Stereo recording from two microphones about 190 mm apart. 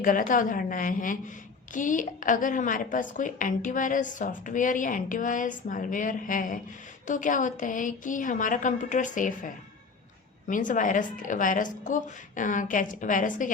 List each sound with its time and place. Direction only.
0.0 s a woman's voice: 45° left (ahead or behind)
10.5 s a woman's voice: 45° left (ahead or behind)